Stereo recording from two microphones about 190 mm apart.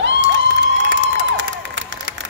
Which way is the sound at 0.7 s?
75° right (ahead or behind).